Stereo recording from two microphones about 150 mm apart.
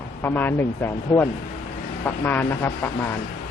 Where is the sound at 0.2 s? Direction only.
15° left (ahead or behind).